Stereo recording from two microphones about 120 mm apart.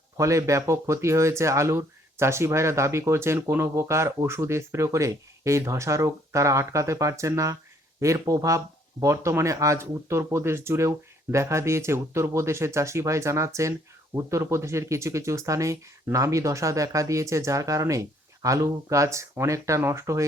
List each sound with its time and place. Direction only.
0.2 s speech: 25° right (ahead or behind)